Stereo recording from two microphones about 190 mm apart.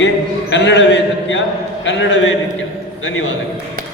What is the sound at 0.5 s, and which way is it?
A man's voice, 70° left (ahead or behind).